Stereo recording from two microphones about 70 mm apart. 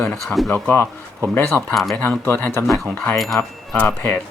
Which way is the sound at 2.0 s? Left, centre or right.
Left.